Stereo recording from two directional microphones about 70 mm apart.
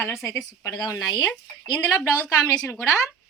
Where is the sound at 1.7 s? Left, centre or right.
Left.